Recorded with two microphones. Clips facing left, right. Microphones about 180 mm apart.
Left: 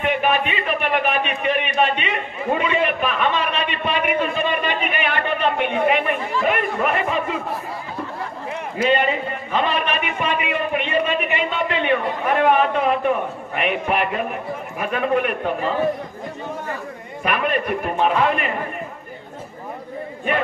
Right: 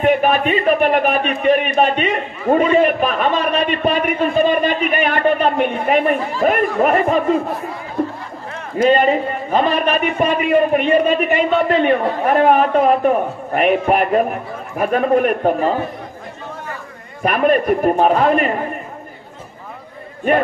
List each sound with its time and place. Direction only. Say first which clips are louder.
0.0 s speech: right 6 dB; 40° right (ahead or behind)
8.8 s speech: right 6 dB; 40° right (ahead or behind)
17.2 s speech: right 7 dB; 40° right (ahead or behind)